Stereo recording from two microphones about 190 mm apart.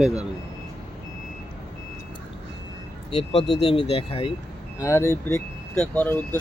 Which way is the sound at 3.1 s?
30° left (ahead or behind).